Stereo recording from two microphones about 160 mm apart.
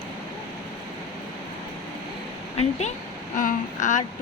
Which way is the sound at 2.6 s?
45° left (ahead or behind).